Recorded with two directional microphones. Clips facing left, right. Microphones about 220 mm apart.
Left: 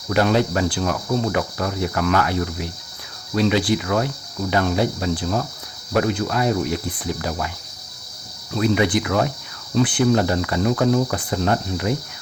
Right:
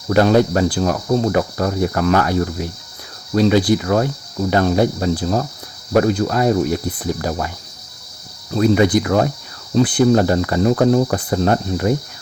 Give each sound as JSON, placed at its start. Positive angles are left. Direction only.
{"t": 0.1, "sound": "speech", "side_deg": -40}
{"t": 8.5, "sound": "speech", "side_deg": -40}